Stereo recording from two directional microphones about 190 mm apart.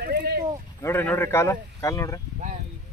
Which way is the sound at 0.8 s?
10° left (ahead or behind).